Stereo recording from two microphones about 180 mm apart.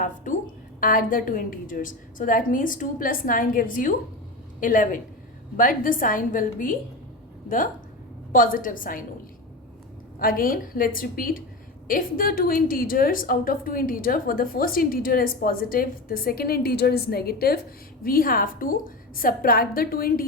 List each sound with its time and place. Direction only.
0.3 s a sound: 45° left (ahead or behind)
0.8 s a woman's voice: 50° left (ahead or behind)
10.2 s a woman's voice: 50° left (ahead or behind)